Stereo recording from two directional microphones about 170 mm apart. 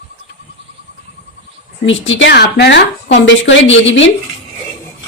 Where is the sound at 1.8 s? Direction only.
90° left.